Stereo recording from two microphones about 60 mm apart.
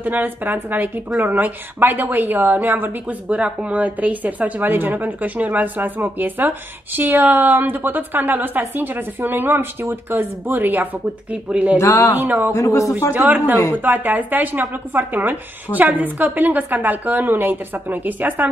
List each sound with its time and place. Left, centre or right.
0.0 s speech: right
3.3 s speech: centre
11.4 s speech: centre
11.8 s speech: left
12.2 s speech: right
12.5 s speech: left
13.7 s speech: right